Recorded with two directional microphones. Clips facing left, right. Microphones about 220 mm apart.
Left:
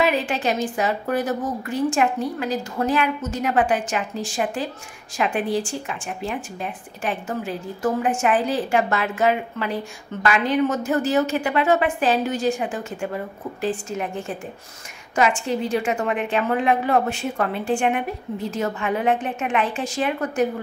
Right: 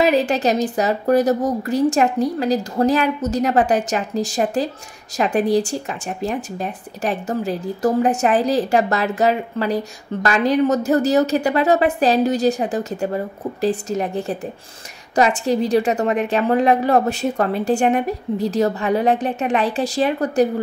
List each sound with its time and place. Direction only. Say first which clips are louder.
0.0 s a woman's voice: right 5 dB; 40° right (ahead or behind)